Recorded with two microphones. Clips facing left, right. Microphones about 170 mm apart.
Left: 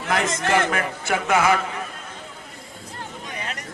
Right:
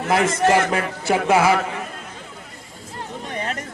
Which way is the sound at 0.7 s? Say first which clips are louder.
Right 3 dB; 30° right (ahead or behind).